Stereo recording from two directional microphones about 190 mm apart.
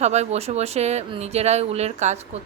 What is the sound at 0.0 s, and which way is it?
Speech, 35° right (ahead or behind).